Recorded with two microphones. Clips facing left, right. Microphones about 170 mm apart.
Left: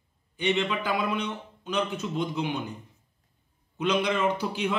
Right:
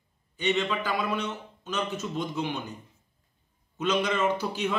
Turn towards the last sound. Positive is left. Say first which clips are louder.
# even
turn(degrees=10)  # may be behind; listen again after turning